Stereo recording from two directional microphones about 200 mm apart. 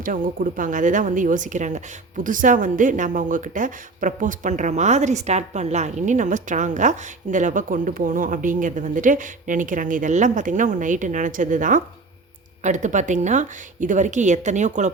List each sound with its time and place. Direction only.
0.0 s speech: 45° right (ahead or behind)